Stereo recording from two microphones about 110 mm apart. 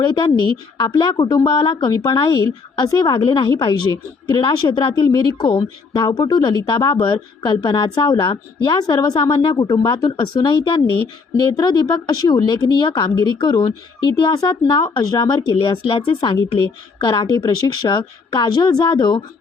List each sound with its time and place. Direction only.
0.0 s a woman's voice: 45° left (ahead or behind)
1.2 s speech: 30° left (ahead or behind)
1.5 s a woman's voice: 50° left (ahead or behind)